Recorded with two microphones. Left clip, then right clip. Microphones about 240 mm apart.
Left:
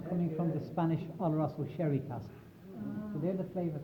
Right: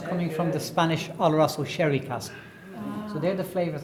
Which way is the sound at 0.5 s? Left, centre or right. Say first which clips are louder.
Right 10 dB; right.